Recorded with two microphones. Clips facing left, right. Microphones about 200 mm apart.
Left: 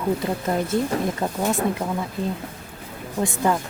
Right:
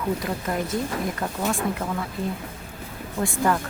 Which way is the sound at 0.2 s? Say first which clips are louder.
Left 3 dB; 25° left (ahead or behind).